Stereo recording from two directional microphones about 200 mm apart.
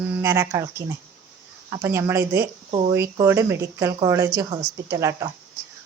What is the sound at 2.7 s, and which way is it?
Speech, 30° right (ahead or behind).